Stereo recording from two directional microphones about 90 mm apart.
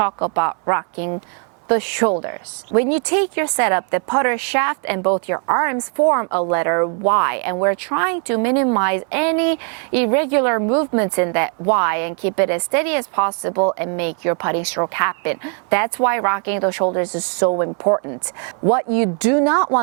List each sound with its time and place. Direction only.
0.0 s a woman's voice: 20° right (ahead or behind)